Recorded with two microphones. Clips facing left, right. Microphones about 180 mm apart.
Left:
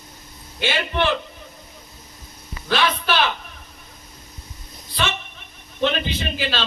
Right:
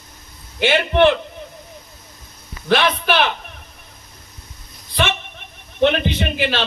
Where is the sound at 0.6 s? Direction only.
55° right (ahead or behind).